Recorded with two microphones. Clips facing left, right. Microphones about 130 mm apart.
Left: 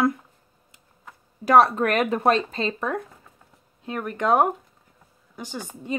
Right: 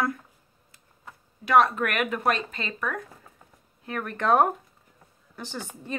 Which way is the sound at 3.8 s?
15° left (ahead or behind).